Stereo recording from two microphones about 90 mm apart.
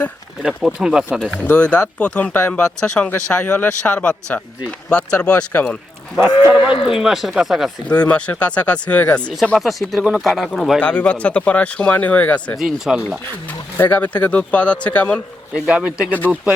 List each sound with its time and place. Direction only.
0.4 s speech: 10° right (ahead or behind)
1.5 s speech: 10° left (ahead or behind)
6.1 s speech: 20° right (ahead or behind)
6.8 s speech: 5° right (ahead or behind)
7.9 s speech: 15° left (ahead or behind)
9.6 s speech: centre (ahead or behind)
10.8 s speech: 15° left (ahead or behind)
12.5 s speech: 5° right (ahead or behind)
13.7 s speech: 20° left (ahead or behind)
15.5 s speech: 10° right (ahead or behind)